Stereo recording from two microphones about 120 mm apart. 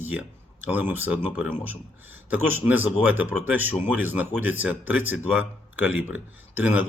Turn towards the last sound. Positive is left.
turn(degrees=-15)  # may be behind; listen again after turning